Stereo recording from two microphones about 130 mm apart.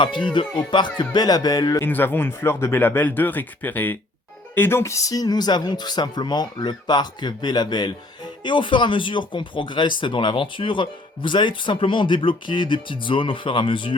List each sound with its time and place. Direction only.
0.0 s speech: 35° left (ahead or behind)
1.8 s speech: 15° left (ahead or behind); by 13.9 s 40° left (ahead or behind)